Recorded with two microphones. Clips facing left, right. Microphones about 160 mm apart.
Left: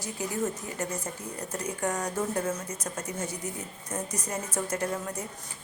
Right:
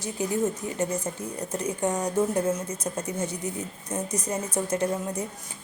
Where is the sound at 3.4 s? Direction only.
20° right (ahead or behind).